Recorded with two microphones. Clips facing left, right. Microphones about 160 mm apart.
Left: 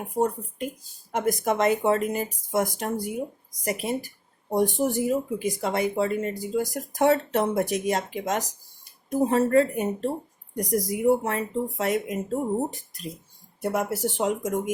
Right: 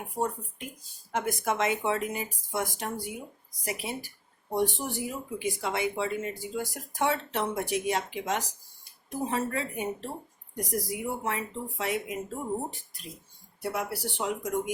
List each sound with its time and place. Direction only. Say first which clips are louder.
0.0 s speech: left 6 dB; 40° left (ahead or behind)
13.6 s speech: left 6 dB; 45° left (ahead or behind)